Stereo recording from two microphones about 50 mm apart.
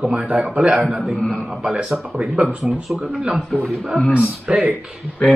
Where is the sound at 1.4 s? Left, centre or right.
Centre.